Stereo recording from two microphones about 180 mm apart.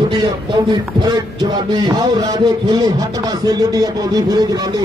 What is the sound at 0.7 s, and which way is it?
A man's voice, 25° right (ahead or behind).